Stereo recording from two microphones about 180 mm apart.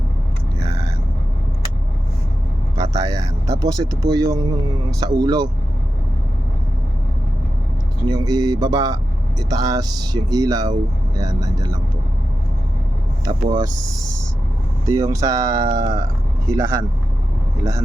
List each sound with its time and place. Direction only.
3.0 s speech: 20° right (ahead or behind)
8.0 s speech: 20° right (ahead or behind)
13.2 s speech: 20° right (ahead or behind)
14.8 s speech: 20° right (ahead or behind)